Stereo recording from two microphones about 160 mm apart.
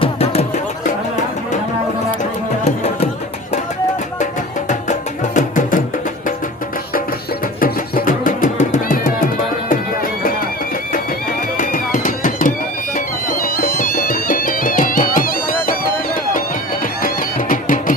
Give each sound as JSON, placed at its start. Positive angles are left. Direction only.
{"t": 0.0, "sound": "music", "side_deg": 40}
{"t": 2.6, "sound": "music", "side_deg": 45}
{"t": 4.7, "sound": "music", "side_deg": 50}
{"t": 7.6, "sound": "music", "side_deg": 60}
{"t": 11.5, "sound": "music", "side_deg": 55}